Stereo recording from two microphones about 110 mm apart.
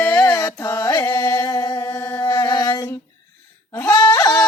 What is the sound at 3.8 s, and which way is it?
Bleat, 20° left (ahead or behind).